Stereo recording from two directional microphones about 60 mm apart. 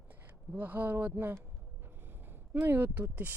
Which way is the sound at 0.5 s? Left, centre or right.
Right.